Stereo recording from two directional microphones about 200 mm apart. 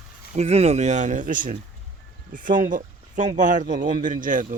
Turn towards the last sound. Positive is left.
turn(degrees=-40)  # may be behind; listen again after turning